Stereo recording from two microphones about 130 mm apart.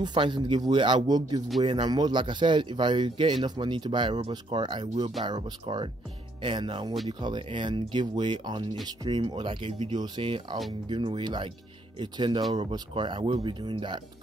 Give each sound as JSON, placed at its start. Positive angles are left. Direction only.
{"t": 0.0, "sound": "speech", "side_deg": -35}